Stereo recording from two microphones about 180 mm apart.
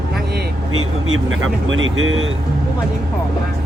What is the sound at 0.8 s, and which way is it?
Speech, 90° right.